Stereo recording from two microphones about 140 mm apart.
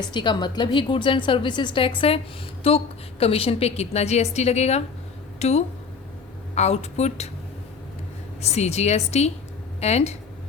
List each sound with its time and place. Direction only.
0.0 s a woman's voice: 35° left (ahead or behind); by 7.3 s 50° left (ahead or behind)
8.4 s a woman's voice: 50° left (ahead or behind)